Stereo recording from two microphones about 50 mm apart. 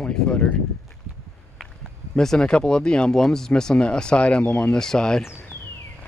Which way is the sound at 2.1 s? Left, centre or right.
Centre.